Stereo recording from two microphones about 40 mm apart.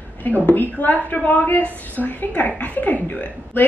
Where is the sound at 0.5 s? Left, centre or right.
Left.